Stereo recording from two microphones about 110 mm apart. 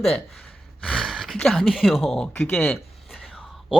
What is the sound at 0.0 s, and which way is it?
Speech, 5° left (ahead or behind).